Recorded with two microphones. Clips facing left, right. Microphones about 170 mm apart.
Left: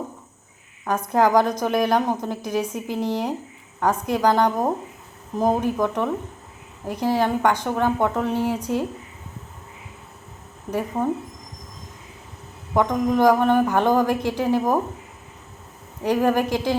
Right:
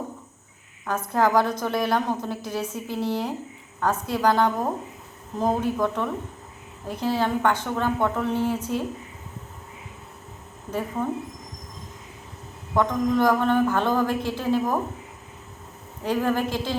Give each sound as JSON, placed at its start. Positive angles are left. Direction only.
{"t": 0.9, "sound": "a woman's voice", "side_deg": 15}
{"t": 12.7, "sound": "a woman's voice", "side_deg": 15}
{"t": 16.0, "sound": "a woman's voice", "side_deg": 15}